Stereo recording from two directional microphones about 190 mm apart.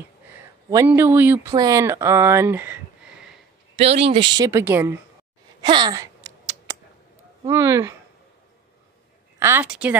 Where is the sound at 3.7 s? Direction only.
30° right (ahead or behind); by 4.9 s 10° right (ahead or behind).